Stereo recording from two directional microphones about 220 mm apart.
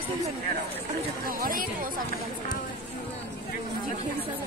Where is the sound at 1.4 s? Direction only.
40° right (ahead or behind).